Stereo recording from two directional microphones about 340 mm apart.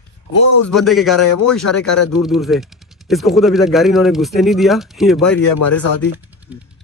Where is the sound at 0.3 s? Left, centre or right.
Left.